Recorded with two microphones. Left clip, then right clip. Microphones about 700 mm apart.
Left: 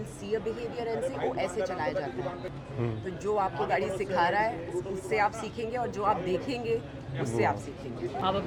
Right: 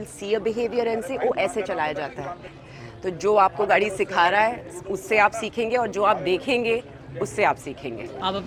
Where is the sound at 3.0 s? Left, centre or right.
Right.